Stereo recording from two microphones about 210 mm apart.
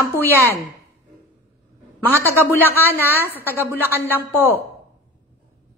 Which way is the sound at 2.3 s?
10° right (ahead or behind).